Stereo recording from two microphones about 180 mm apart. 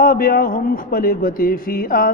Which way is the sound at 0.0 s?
55° left (ahead or behind).